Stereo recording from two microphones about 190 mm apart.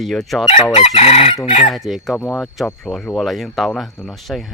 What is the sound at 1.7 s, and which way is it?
Speech, centre (ahead or behind).